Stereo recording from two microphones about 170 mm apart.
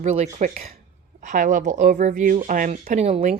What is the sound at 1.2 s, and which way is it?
Speech, 50° right (ahead or behind).